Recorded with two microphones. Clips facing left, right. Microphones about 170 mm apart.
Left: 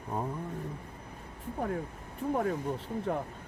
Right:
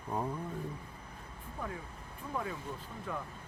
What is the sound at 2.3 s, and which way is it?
Speech, 45° left (ahead or behind).